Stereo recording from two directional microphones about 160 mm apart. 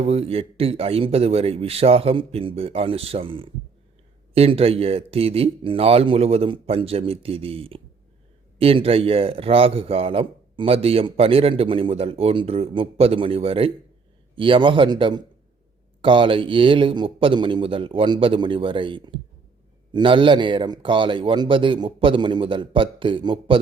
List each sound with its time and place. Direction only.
0.0 s a man's voice: 40° right (ahead or behind)